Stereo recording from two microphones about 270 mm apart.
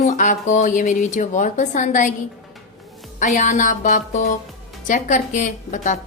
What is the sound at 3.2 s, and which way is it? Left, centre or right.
Speech, left.